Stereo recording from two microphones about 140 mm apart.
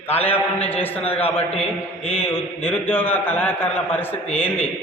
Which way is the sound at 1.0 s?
45° left (ahead or behind).